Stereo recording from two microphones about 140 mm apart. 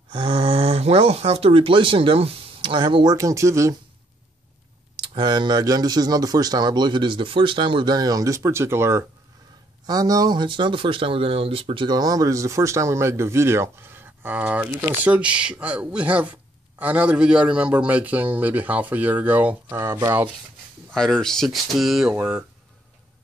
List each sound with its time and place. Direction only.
0.1 s speech: 40° right (ahead or behind); by 3.7 s 20° right (ahead or behind)
5.0 s speech: 35° right (ahead or behind)
20.9 s speech: 5° left (ahead or behind)